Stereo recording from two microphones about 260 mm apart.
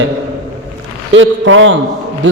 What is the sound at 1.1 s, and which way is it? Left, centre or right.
Speech, right.